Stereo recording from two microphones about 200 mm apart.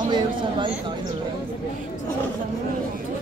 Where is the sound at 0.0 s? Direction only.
20° right (ahead or behind).